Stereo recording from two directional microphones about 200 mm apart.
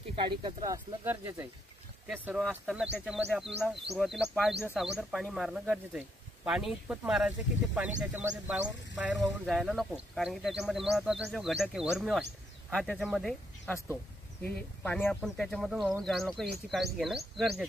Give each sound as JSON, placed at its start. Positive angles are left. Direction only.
{"t": 0.1, "sound": "speech", "side_deg": -25}